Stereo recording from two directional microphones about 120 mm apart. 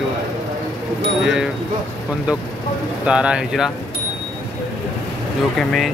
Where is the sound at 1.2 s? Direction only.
5° right (ahead or behind).